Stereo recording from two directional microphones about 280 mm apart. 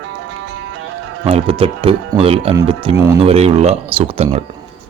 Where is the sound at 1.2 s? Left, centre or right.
Centre.